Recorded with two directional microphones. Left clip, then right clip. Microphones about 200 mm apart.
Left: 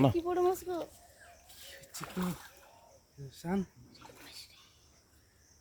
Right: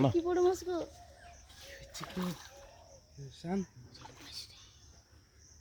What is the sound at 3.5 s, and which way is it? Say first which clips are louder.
Speech: left 2 dB; 25° left (ahead or behind).